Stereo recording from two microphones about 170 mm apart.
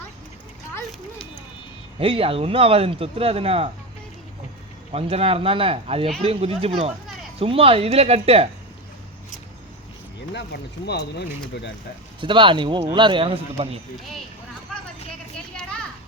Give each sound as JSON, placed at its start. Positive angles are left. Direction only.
{"t": 2.0, "sound": "speech", "side_deg": -35}
{"t": 4.9, "sound": "speech", "side_deg": -35}
{"t": 10.3, "sound": "speech", "side_deg": 80}
{"t": 12.2, "sound": "a man's voice", "side_deg": -30}